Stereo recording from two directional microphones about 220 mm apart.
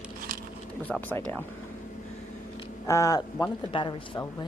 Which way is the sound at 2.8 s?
15° left (ahead or behind).